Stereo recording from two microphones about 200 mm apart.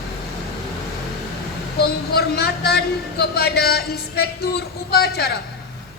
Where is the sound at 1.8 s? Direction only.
55° left (ahead or behind).